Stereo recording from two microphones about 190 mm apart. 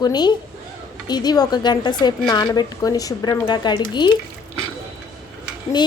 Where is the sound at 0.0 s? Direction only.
20° left (ahead or behind).